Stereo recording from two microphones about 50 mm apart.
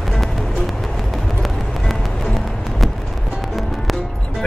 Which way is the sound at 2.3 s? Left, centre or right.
Centre.